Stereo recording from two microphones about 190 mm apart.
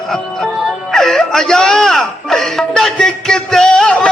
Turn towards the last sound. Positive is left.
turn(degrees=5)  # may be behind; listen again after turning